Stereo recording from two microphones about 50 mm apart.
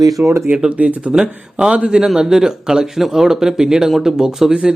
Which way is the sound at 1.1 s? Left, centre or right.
Centre.